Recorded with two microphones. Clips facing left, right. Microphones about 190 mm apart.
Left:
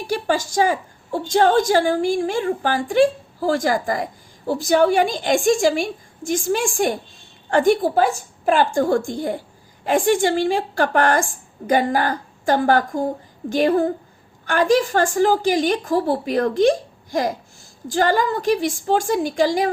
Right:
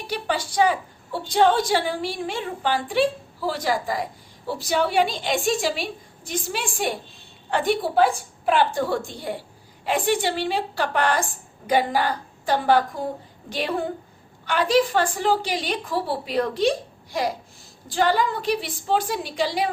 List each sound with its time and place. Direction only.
0.1 s a woman's voice: 45° left (ahead or behind)